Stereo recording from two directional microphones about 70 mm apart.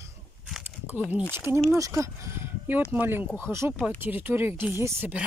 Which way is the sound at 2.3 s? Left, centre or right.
Right.